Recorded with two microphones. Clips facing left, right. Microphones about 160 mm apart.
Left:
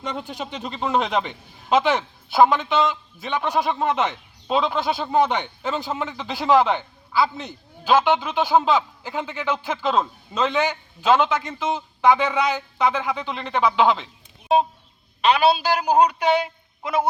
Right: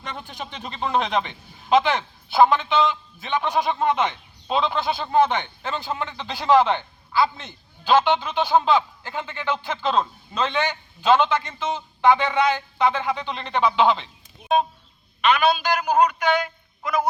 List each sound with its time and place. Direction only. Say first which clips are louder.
0.5 s a man's voice: left 1 dB; 5° left (ahead or behind)
14.4 s a sound: left 2 dB; 30° left (ahead or behind)
15.2 s a man's voice: left 2 dB; 30° left (ahead or behind)